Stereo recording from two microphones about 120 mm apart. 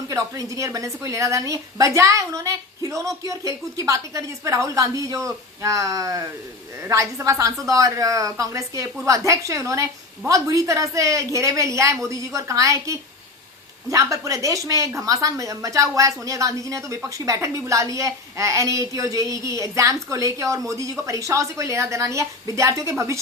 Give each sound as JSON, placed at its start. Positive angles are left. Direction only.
{"t": 0.1, "sound": "speech", "side_deg": -30}